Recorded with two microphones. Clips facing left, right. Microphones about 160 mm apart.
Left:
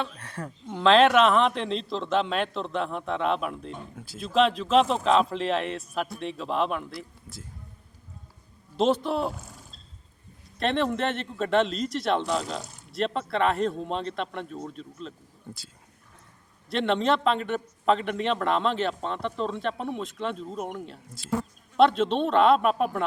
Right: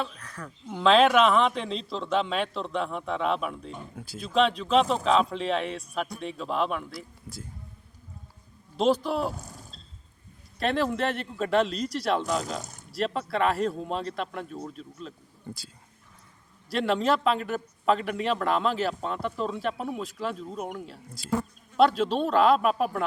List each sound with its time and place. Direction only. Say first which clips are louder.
0.2 s speech: left 4 dB; 30° left (ahead or behind)
0.7 s a man's voice: left 1 dB; centre (ahead or behind)
8.7 s a man's voice: even; centre (ahead or behind)
10.6 s a man's voice: left 1 dB; centre (ahead or behind)
12.6 s a sound: right 1 dB; 45° right (ahead or behind)
12.9 s a man's voice: left 1 dB; centre (ahead or behind)
16.6 s a man's voice: left 1 dB; centre (ahead or behind)